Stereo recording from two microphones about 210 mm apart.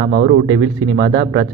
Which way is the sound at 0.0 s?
45° right (ahead or behind).